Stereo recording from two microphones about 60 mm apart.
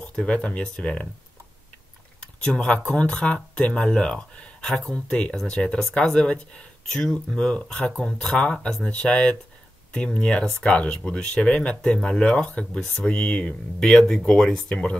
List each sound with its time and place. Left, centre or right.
0.0 s speech: centre
2.1 s a sound: centre
2.9 s speech: centre